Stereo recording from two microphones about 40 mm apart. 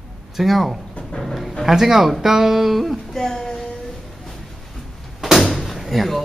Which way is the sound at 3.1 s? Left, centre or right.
Centre.